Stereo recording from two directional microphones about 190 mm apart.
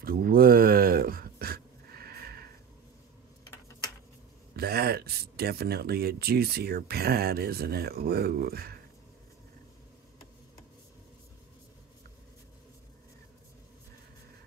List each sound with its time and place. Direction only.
0.0 s pant: 50° right (ahead or behind)
4.6 s speech: 55° right (ahead or behind)